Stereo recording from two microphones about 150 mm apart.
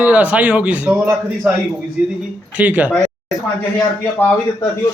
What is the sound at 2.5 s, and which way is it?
Speech, 10° right (ahead or behind).